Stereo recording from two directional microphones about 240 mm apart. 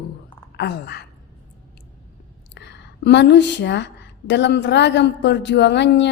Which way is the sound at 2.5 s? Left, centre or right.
Left.